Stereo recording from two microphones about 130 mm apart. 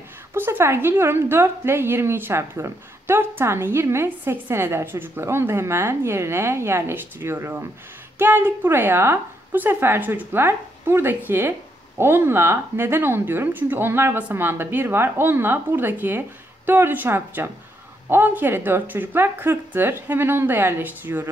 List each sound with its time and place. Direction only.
0.3 s a woman's voice: 15° right (ahead or behind)